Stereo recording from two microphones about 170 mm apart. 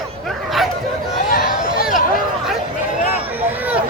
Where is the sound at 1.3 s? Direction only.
60° left (ahead or behind).